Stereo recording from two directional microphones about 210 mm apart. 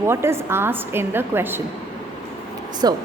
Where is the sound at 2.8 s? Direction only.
20° right (ahead or behind).